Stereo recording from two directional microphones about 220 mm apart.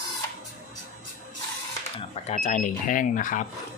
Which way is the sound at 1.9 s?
30° left (ahead or behind).